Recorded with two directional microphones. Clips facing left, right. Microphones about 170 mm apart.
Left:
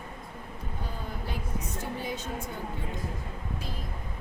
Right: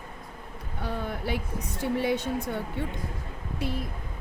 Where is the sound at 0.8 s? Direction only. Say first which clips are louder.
Right 8 dB; 75° right (ahead or behind).